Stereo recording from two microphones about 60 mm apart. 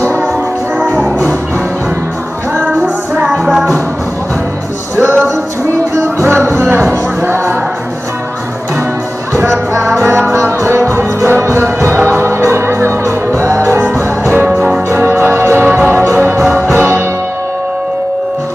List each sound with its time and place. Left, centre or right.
0.7 s music: right
3.4 s music: centre
4.9 s music: right
6.2 s music: right
9.9 s music: right
14.3 s music: right
14.9 s music: right